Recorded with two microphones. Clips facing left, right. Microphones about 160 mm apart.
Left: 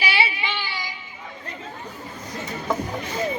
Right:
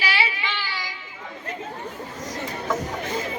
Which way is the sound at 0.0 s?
15° left (ahead or behind).